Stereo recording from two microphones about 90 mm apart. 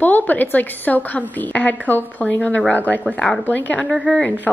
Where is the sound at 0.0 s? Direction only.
20° left (ahead or behind).